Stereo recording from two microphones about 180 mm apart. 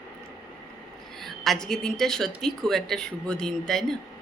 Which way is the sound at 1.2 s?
Centre (ahead or behind).